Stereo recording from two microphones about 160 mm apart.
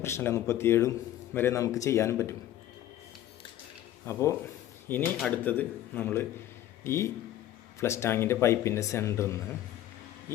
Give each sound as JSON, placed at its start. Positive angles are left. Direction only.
{"t": 0.0, "sound": "a man's voice", "side_deg": 15}
{"t": 4.0, "sound": "a man's voice", "side_deg": 20}